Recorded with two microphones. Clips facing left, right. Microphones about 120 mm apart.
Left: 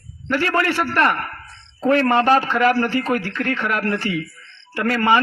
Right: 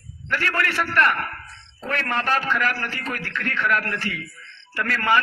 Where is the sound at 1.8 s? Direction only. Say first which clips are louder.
Left 10 dB; 35° left (ahead or behind).